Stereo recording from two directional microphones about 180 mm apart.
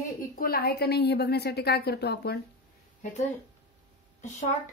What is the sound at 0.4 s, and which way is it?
A woman's voice, 55° left (ahead or behind).